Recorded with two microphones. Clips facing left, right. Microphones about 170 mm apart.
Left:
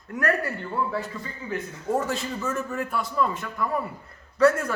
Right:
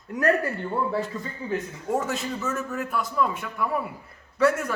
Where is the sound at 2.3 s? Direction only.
Centre (ahead or behind).